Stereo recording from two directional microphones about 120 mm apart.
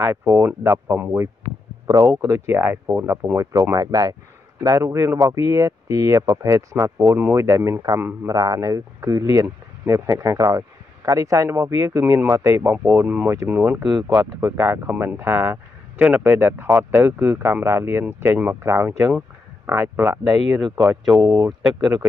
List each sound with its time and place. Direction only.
0.0 s speech: 20° right (ahead or behind)
1.9 s speech: 30° right (ahead or behind)
13.8 s speech: 5° right (ahead or behind)
14.2 s speech: 20° right (ahead or behind)
20.5 s speech: 35° right (ahead or behind)